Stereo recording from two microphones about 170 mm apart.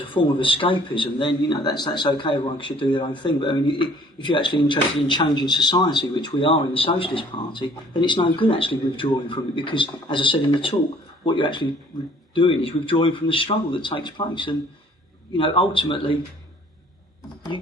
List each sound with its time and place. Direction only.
0.1 s a man's voice: 30° left (ahead or behind)